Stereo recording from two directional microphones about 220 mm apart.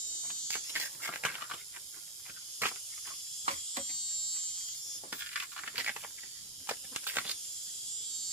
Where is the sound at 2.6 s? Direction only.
10° right (ahead or behind).